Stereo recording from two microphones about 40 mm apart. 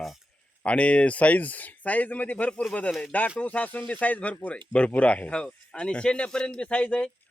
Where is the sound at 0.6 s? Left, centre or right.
Left.